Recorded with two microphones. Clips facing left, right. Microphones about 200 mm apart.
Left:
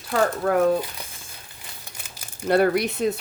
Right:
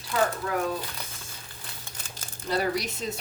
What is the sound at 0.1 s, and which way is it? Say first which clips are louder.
Speech: left 6 dB; 50° left (ahead or behind).